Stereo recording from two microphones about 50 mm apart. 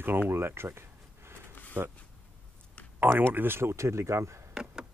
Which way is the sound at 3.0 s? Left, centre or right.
Right.